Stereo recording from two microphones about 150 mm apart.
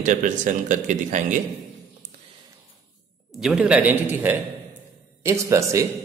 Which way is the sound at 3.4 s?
5° right (ahead or behind).